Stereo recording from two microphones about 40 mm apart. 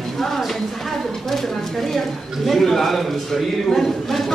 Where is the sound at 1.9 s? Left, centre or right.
Centre.